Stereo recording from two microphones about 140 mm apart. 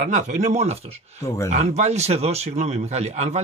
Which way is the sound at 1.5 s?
55° right (ahead or behind).